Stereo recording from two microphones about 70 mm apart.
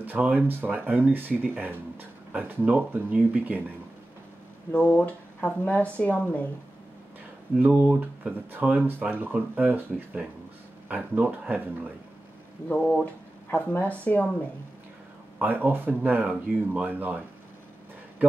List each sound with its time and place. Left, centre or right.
0.0 s speech: right
4.7 s speech: left
7.5 s speech: right
12.6 s speech: centre
15.3 s speech: right